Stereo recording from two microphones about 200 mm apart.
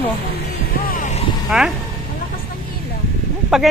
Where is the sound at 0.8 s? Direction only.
40° left (ahead or behind).